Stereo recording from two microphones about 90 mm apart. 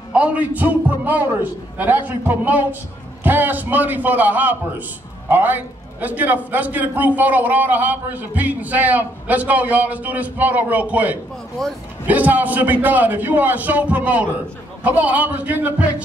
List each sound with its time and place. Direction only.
0.1 s a man's voice: 15° right (ahead or behind)
11.6 s speech: 5° left (ahead or behind)
12.1 s a man's voice: 20° right (ahead or behind)